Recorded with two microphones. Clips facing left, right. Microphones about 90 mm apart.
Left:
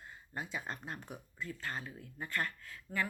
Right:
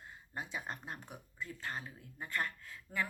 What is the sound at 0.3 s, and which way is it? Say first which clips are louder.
Speech: left 1 dB; 15° right (ahead or behind).